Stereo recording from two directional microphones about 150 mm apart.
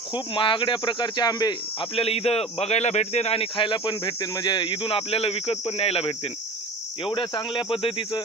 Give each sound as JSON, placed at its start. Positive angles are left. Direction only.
{"t": 0.1, "sound": "a man's voice", "side_deg": 35}
{"t": 2.0, "sound": "a man's voice", "side_deg": 40}